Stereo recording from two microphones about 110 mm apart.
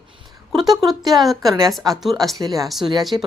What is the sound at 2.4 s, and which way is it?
Speech, 35° right (ahead or behind).